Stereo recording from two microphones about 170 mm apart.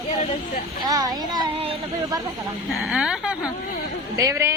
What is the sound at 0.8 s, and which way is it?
Speech, 20° right (ahead or behind).